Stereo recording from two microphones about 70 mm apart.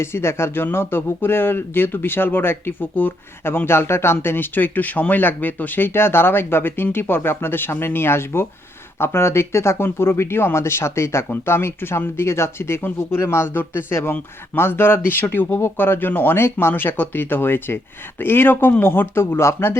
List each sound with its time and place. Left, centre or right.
0.0 s speech: left